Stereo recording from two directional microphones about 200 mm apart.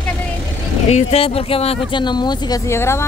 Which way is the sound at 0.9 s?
30° left (ahead or behind).